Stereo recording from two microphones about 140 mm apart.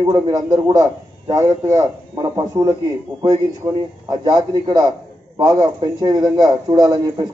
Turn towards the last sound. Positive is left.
turn(degrees=-25)  # may be behind; listen again after turning